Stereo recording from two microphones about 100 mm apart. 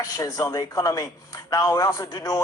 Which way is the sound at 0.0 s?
35° left (ahead or behind).